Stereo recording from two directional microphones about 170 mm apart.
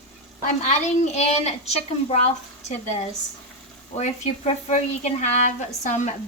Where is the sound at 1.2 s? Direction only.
40° left (ahead or behind).